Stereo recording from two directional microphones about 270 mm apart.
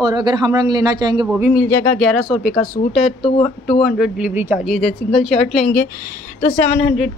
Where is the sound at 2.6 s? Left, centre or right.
Left.